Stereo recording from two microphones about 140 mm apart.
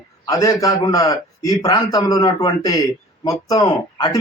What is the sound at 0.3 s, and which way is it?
A man's voice, 25° left (ahead or behind).